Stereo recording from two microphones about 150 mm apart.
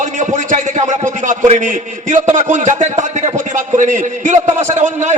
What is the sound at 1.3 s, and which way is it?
A man's voice, 55° right (ahead or behind).